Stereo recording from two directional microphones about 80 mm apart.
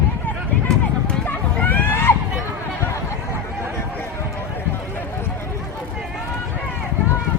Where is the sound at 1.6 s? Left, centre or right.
Left.